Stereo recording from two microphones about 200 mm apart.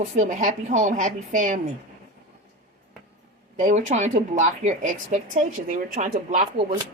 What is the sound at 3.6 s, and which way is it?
Speech, 40° right (ahead or behind).